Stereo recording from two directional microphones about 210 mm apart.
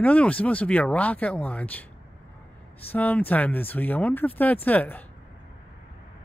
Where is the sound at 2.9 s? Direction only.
5° left (ahead or behind).